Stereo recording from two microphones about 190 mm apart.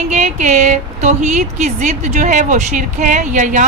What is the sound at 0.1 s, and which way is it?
A woman's voice, 40° right (ahead or behind).